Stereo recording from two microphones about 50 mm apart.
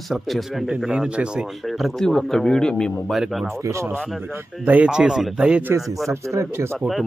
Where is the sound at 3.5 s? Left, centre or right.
Right.